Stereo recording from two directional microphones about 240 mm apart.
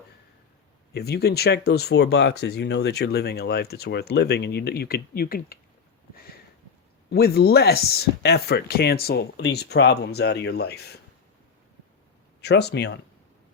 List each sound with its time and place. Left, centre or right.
0.9 s speech: left
7.1 s speech: left
12.4 s speech: left